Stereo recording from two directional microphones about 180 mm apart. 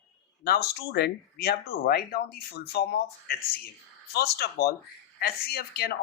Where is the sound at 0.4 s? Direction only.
60° left (ahead or behind).